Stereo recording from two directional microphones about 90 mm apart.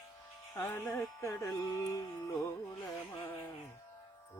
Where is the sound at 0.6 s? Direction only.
35° left (ahead or behind).